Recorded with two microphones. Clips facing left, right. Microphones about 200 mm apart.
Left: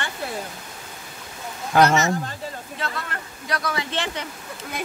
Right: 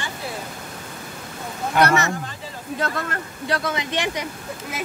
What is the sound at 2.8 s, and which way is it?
Speech, 45° right (ahead or behind).